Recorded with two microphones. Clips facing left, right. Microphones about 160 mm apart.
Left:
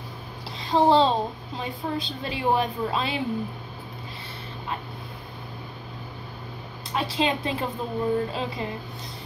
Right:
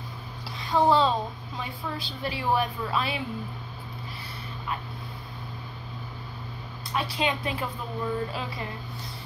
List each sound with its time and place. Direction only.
0.6 s a woman's voice: 25° left (ahead or behind)
6.9 s a woman's voice: 25° left (ahead or behind)